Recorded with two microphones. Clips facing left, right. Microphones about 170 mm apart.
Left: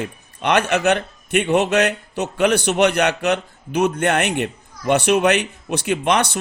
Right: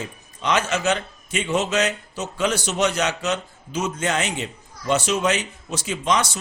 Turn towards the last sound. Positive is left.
turn(degrees=60)  # may be behind; listen again after turning